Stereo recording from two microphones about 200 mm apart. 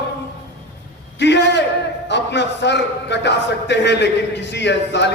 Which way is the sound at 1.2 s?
60° left (ahead or behind).